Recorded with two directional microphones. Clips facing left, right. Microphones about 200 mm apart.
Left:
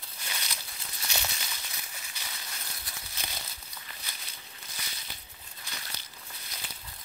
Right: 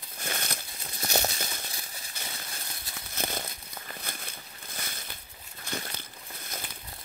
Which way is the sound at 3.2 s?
50° right (ahead or behind).